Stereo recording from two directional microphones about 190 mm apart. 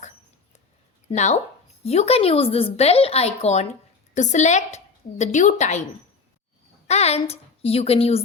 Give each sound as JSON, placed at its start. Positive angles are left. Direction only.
{"t": 1.0, "sound": "a woman's voice", "side_deg": 35}
{"t": 6.8, "sound": "a woman's voice", "side_deg": 35}